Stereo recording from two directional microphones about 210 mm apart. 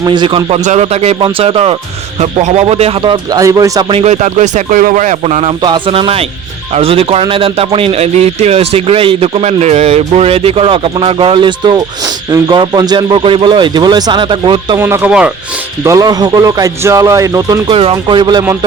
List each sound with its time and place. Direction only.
0.0 s a man's voice: 20° right (ahead or behind)